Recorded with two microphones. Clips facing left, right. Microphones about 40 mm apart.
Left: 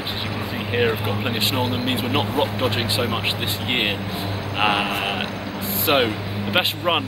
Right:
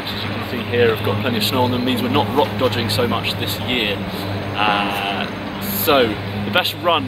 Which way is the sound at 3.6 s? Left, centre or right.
Centre.